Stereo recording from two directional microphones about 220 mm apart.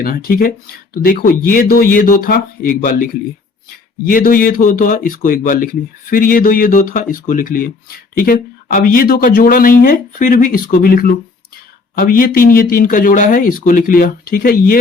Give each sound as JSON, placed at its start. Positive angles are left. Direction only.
{"t": 0.0, "sound": "speech", "side_deg": 40}